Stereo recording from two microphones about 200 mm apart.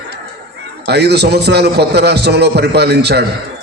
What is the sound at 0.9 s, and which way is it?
A man's voice, 55° right (ahead or behind).